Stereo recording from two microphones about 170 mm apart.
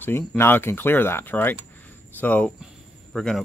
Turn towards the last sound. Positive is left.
turn(degrees=0)  # may be behind; listen again after turning